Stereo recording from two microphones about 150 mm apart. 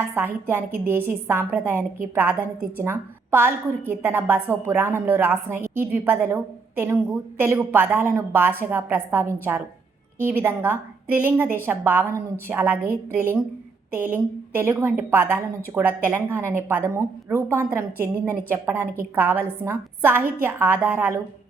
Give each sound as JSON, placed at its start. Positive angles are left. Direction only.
{"t": 0.4, "sound": "a woman's voice", "side_deg": -15}
{"t": 10.2, "sound": "a woman's voice", "side_deg": -15}